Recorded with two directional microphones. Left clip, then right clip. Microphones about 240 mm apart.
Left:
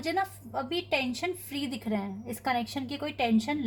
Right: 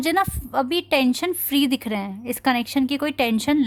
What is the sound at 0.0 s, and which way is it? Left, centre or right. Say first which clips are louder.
A woman's voice: right 9 dB; right.